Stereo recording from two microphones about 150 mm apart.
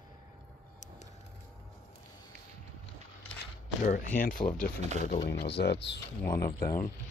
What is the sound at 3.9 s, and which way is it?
Speech, 65° left (ahead or behind).